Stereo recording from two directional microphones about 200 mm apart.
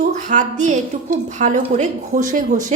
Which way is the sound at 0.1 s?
40° right (ahead or behind).